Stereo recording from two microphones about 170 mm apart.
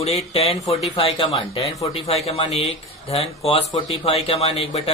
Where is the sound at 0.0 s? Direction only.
40° left (ahead or behind).